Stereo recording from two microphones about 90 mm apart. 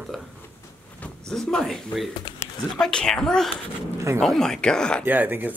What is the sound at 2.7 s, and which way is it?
Speech, 5° left (ahead or behind).